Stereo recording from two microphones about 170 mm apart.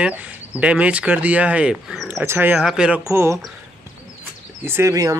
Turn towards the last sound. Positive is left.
turn(degrees=-20)  # may be behind; listen again after turning